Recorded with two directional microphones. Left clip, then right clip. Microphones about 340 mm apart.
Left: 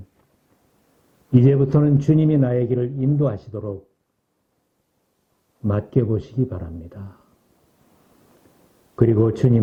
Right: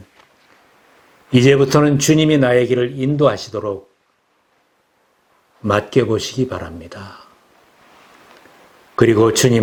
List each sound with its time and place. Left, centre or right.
1.3 s speech: centre
5.6 s speech: centre
7.9 s a sound: centre